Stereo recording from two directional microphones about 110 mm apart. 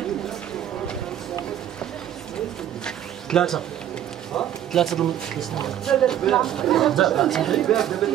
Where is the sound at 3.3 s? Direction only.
5° left (ahead or behind).